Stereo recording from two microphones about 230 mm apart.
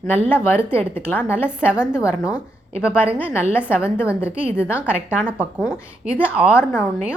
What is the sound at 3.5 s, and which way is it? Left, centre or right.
Speech, centre.